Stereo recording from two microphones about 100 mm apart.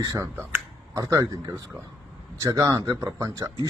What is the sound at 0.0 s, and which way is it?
Speech, 40° right (ahead or behind).